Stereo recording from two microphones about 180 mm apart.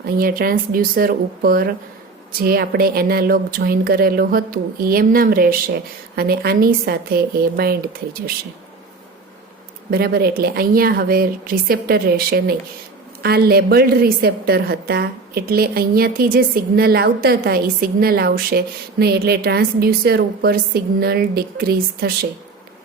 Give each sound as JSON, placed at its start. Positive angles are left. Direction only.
{"t": 0.2, "sound": "a woman's voice", "side_deg": -55}
{"t": 9.9, "sound": "a woman's voice", "side_deg": -60}